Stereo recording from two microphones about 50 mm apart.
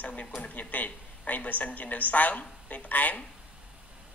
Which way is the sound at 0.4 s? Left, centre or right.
Left.